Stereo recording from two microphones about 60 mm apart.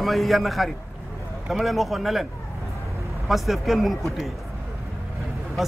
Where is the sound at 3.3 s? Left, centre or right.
Centre.